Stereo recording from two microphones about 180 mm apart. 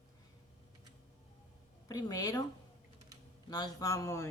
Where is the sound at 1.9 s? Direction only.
20° left (ahead or behind).